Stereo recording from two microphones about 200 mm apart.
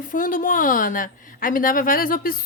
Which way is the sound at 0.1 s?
40° left (ahead or behind).